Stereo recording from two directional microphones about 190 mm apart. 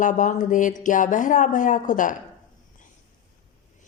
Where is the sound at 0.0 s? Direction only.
40° left (ahead or behind).